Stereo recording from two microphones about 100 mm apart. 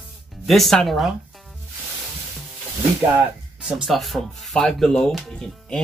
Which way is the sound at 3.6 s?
5° right (ahead or behind).